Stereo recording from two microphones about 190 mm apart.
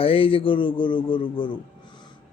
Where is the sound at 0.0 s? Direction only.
30° left (ahead or behind).